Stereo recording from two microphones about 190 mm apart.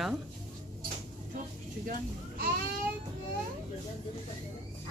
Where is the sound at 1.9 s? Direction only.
50° right (ahead or behind).